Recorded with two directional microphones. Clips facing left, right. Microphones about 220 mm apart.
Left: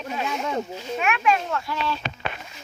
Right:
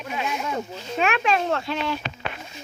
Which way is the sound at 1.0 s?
90° right.